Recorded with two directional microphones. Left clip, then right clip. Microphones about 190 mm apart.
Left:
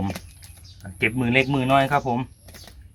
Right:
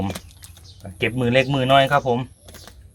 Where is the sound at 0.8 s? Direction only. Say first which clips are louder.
Right 1 dB; 35° right (ahead or behind).